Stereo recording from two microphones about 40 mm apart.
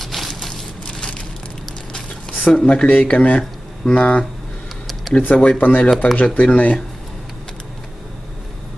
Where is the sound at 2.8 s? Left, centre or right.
Left.